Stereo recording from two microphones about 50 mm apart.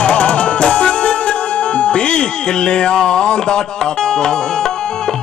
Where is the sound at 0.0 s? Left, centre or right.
Left.